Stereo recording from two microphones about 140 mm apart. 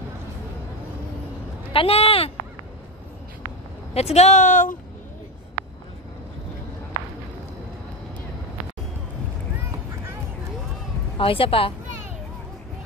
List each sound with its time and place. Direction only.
1.7 s speech: 40° left (ahead or behind)
3.9 s speech: 50° left (ahead or behind); by 4.7 s 65° left (ahead or behind)
11.1 s a woman's voice: 40° left (ahead or behind)